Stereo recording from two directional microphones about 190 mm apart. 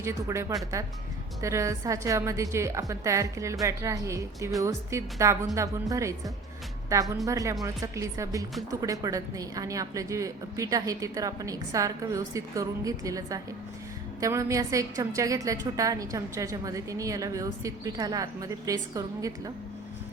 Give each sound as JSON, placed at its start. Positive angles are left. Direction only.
{"t": 0.0, "sound": "a woman's voice", "side_deg": -15}